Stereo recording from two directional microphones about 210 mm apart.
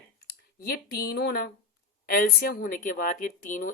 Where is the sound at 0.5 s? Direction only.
50° left (ahead or behind).